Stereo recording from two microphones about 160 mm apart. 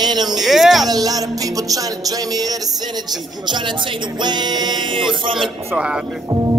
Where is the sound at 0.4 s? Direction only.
Centre (ahead or behind).